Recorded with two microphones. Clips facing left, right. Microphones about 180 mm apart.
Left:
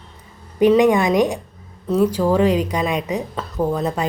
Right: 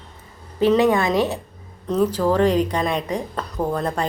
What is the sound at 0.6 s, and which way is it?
Speech, 15° left (ahead or behind).